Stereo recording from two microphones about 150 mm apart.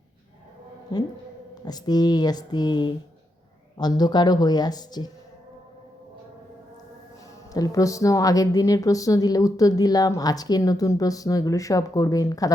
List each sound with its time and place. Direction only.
0.9 s a woman's voice: 25° left (ahead or behind)
7.5 s a woman's voice: 25° left (ahead or behind)